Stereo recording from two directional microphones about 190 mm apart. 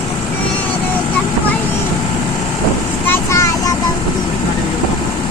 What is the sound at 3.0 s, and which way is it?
Child singing, 15° left (ahead or behind).